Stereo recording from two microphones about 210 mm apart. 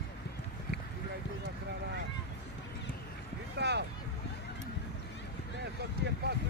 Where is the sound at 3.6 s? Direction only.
55° right (ahead or behind).